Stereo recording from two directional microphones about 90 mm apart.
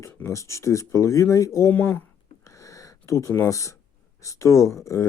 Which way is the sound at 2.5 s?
35° left (ahead or behind).